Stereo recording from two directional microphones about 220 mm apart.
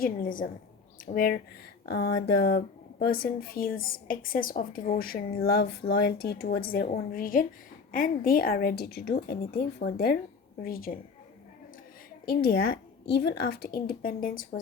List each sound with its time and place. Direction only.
0.0 s speech: 40° left (ahead or behind)
12.2 s speech: 45° left (ahead or behind)